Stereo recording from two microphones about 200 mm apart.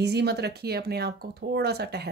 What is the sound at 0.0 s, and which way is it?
Speech, 55° right (ahead or behind).